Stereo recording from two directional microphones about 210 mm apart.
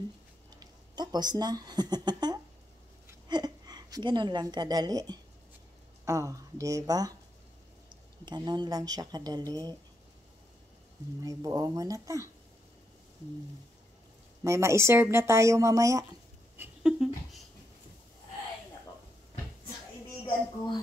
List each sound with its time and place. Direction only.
0.6 s a woman's voice: 20° right (ahead or behind)
11.2 s speech: 15° right (ahead or behind)
14.4 s a woman's voice: 15° right (ahead or behind)
16.8 s dog: 5° right (ahead or behind)